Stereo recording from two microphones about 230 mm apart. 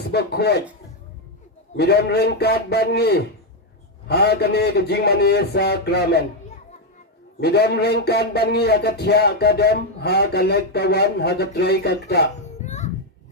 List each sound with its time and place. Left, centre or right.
0.1 s a man's voice: left
1.7 s a man's voice: left
7.3 s a man's voice: left
12.4 s music: left